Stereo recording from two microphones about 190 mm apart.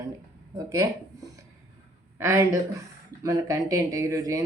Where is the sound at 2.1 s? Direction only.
15° right (ahead or behind).